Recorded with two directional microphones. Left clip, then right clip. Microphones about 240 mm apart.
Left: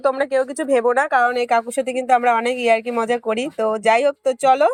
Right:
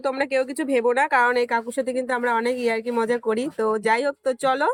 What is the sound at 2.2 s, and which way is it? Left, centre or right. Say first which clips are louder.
Speech: left 5 dB; left.